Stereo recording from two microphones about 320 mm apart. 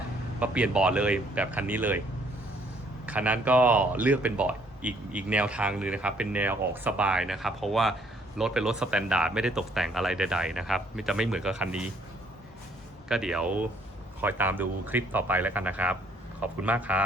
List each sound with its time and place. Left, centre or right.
0.3 s speech: centre
3.1 s speech: centre
13.1 s speech: centre